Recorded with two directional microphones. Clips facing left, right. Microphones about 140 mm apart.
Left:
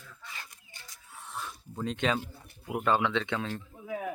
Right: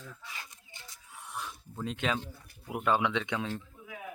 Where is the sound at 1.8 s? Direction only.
5° right (ahead or behind).